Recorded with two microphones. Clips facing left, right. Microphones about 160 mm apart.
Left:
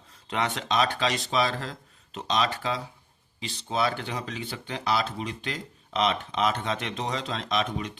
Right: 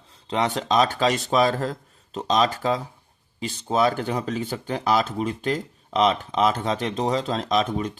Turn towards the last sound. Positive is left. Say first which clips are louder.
# right 6 dB
turn(degrees=-40)  # may be behind; listen again after turning